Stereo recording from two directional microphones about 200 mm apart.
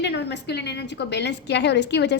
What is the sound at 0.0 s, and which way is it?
A woman's voice, 60° left (ahead or behind).